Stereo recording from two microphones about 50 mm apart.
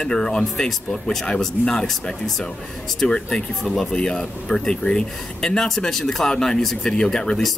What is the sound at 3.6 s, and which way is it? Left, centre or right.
Speech, centre.